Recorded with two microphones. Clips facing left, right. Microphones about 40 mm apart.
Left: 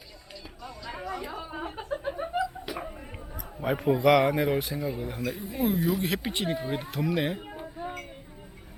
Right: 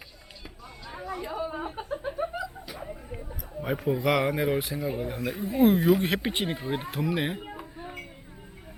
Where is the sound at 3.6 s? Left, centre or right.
Centre.